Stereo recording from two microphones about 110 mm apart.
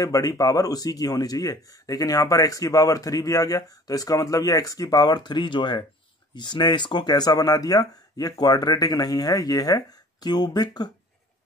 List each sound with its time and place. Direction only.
0.0 s speech: 30° left (ahead or behind)